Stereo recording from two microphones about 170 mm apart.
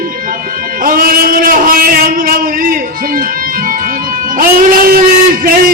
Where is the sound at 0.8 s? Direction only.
55° right (ahead or behind).